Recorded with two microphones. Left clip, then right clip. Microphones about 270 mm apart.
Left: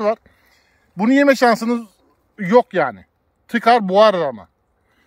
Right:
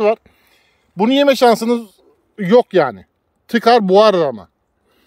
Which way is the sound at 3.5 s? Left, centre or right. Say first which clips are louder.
Right 3 dB; right.